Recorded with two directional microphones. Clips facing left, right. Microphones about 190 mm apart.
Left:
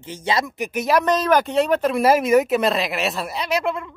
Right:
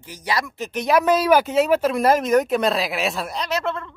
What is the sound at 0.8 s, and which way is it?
Speech, 5° right (ahead or behind).